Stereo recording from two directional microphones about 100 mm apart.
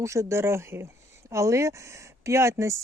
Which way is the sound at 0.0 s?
30° right (ahead or behind).